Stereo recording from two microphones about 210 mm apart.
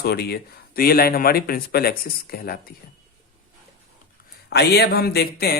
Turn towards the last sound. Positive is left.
turn(degrees=50)  # may be behind; listen again after turning